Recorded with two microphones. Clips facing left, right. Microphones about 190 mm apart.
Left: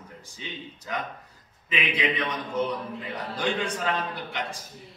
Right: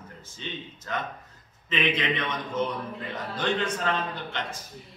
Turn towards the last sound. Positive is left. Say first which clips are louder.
# left 1 dB
turn(degrees=15)  # may be behind; listen again after turning